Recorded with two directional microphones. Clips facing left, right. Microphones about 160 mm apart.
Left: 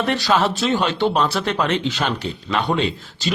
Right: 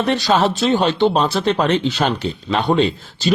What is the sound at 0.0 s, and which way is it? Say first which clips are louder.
Speech: right 3 dB; 20° right (ahead or behind).